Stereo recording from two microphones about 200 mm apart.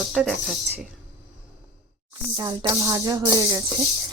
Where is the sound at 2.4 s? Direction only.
20° right (ahead or behind).